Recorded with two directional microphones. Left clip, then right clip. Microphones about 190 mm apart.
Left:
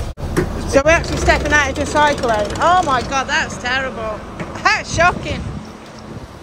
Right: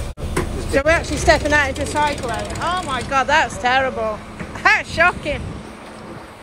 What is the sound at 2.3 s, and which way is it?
Speech, 20° left (ahead or behind).